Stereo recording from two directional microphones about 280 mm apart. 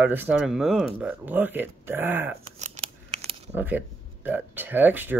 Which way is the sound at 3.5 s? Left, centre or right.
Centre.